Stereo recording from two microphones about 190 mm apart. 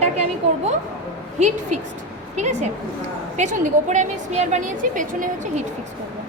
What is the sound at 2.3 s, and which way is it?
A woman's voice, 40° right (ahead or behind).